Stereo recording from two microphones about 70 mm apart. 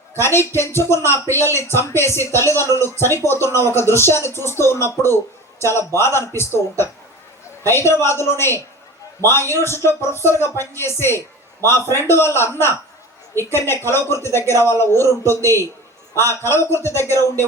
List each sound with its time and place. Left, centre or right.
0.1 s speech: left
15.2 s a man's voice: right
16.1 s speech: left